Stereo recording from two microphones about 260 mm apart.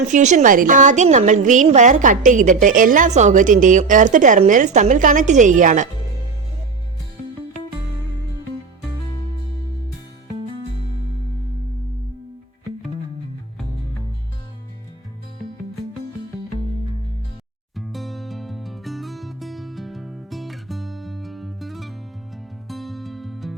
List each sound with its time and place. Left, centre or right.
0.1 s a woman's voice: right
17.7 s music: centre